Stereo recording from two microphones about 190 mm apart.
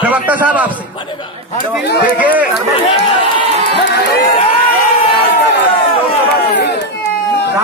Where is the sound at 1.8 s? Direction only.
55° left (ahead or behind).